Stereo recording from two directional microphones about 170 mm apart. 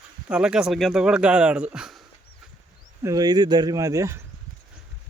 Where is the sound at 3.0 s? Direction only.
20° right (ahead or behind).